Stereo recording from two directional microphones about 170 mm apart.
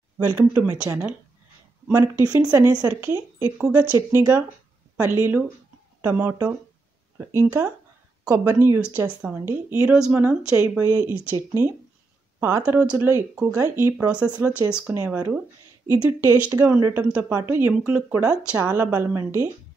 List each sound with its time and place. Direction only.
0.3 s speech: 15° right (ahead or behind)
10.9 s speech: 20° right (ahead or behind)